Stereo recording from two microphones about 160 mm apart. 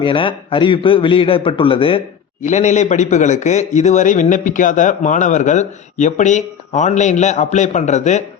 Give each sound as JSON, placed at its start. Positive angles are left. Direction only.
{"t": 0.0, "sound": "a man's voice", "side_deg": 30}
{"t": 2.4, "sound": "a man's voice", "side_deg": 50}